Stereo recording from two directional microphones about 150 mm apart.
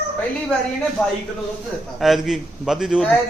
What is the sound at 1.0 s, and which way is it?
A man's voice, 5° left (ahead or behind).